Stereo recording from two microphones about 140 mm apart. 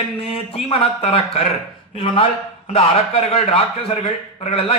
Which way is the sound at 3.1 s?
45° left (ahead or behind).